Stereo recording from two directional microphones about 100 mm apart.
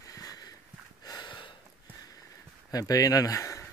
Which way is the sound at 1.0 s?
45° left (ahead or behind).